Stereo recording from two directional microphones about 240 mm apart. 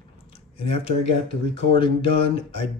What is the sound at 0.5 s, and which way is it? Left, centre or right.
Speech, left.